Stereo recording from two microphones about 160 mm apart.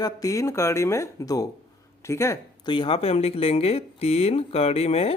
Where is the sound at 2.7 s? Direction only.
30° left (ahead or behind).